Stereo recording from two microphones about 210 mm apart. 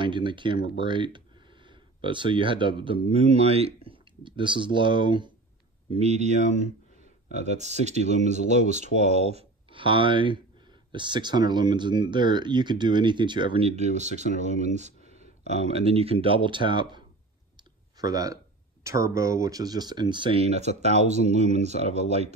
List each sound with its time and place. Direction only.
0.0 s speech: 20° right (ahead or behind)
5.9 s speech: 30° right (ahead or behind)